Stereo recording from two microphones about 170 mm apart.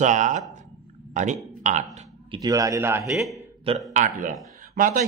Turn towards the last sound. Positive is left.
turn(degrees=-50)  # may be behind; listen again after turning